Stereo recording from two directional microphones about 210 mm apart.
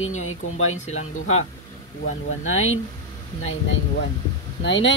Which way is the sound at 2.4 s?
70° left (ahead or behind).